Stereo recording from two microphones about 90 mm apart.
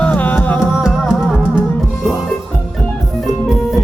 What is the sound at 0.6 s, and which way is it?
Music, 5° right (ahead or behind).